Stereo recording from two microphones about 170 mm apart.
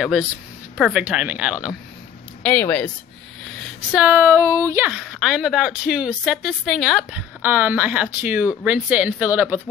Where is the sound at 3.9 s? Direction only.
10° right (ahead or behind).